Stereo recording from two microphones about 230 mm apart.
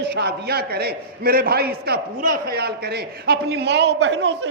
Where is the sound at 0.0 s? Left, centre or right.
Right.